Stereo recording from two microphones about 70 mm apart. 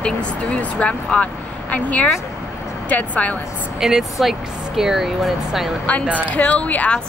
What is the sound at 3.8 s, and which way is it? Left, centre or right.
Speech, centre.